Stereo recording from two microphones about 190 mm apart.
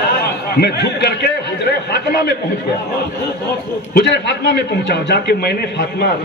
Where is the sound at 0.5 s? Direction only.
60° left (ahead or behind).